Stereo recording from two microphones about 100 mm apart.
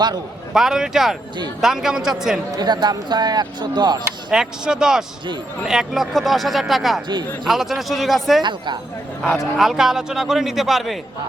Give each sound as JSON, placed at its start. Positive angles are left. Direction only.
{"t": 0.5, "sound": "a man's voice", "side_deg": -5}
{"t": 2.5, "sound": "speech", "side_deg": -45}
{"t": 4.3, "sound": "a man's voice", "side_deg": -5}
{"t": 8.4, "sound": "speech", "side_deg": -50}
{"t": 9.6, "sound": "a man's voice", "side_deg": -5}